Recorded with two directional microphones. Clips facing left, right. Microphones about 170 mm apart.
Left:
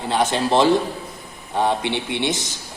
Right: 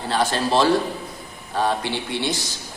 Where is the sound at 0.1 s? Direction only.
20° left (ahead or behind).